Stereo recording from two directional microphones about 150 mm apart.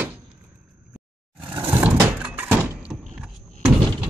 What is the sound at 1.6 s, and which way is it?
Vehicle, 10° right (ahead or behind).